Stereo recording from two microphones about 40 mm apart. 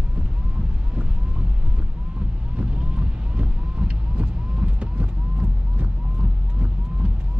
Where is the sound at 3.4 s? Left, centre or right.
Right.